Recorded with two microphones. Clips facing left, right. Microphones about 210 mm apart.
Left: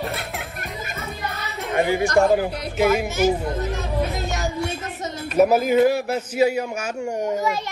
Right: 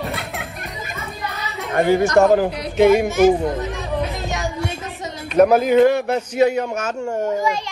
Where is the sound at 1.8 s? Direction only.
45° right (ahead or behind).